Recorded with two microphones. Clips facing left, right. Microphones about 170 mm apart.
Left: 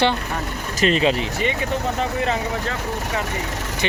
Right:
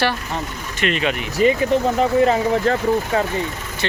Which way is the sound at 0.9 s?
30° left (ahead or behind).